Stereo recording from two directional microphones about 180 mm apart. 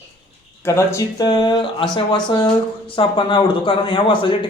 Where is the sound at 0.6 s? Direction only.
15° left (ahead or behind).